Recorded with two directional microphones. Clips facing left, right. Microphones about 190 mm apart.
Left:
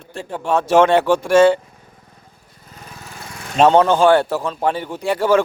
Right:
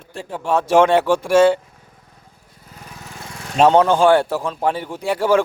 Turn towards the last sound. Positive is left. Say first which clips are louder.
# left 1 dB
turn(degrees=-10)  # may be behind; listen again after turning